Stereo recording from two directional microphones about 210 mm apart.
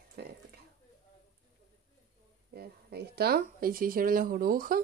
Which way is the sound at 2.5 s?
50° right (ahead or behind).